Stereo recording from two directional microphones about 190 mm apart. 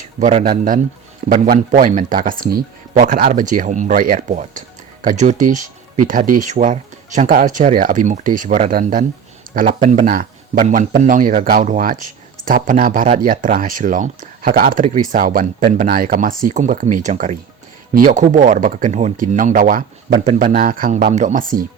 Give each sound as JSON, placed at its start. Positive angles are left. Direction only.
{"t": 0.2, "sound": "speech", "side_deg": -40}